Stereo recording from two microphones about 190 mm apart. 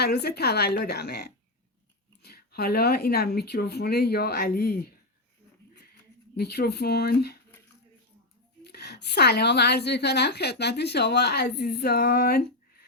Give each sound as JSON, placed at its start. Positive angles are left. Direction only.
{"t": 0.0, "sound": "a woman's voice", "side_deg": 60}
{"t": 6.3, "sound": "a woman's voice", "side_deg": 55}
{"t": 8.6, "sound": "a woman's voice", "side_deg": 60}